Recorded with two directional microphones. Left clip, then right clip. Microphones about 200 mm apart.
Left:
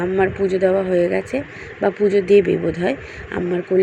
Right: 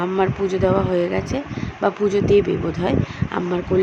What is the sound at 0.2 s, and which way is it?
Speech, centre (ahead or behind).